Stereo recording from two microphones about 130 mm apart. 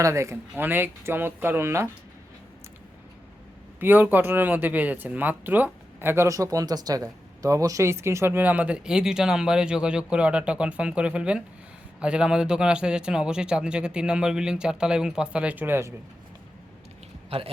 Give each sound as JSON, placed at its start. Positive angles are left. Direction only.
{"t": 0.0, "sound": "speech", "side_deg": -20}
{"t": 3.8, "sound": "speech", "side_deg": -15}
{"t": 17.2, "sound": "speech", "side_deg": -50}